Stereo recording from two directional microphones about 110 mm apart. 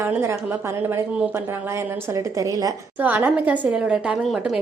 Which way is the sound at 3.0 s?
15° right (ahead or behind).